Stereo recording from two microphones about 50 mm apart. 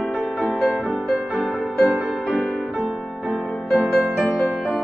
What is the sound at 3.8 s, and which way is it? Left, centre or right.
Music, right.